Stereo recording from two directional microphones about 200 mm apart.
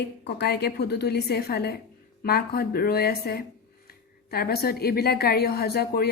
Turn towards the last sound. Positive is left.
turn(degrees=50)  # may be behind; listen again after turning